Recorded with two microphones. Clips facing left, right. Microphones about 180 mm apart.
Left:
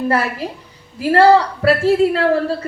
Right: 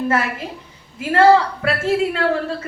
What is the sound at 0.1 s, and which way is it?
A woman's voice, 35° left (ahead or behind).